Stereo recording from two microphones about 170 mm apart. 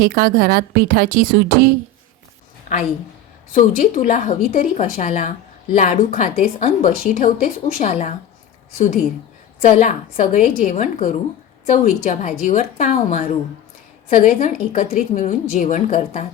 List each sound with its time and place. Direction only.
0.0 s a woman's voice: 55° right (ahead or behind)
3.5 s a woman's voice: 45° left (ahead or behind)
9.6 s a woman's voice: 45° left (ahead or behind)